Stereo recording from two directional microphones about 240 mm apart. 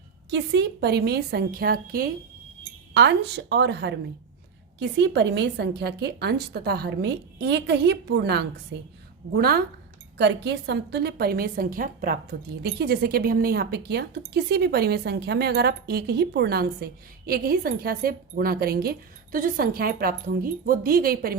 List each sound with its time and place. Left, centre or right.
0.3 s a woman's voice: right